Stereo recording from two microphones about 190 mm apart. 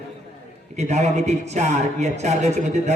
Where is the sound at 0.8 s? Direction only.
35° right (ahead or behind).